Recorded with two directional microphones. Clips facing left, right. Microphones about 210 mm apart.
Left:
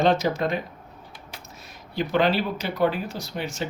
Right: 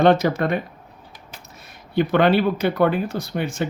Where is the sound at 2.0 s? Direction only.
60° right (ahead or behind).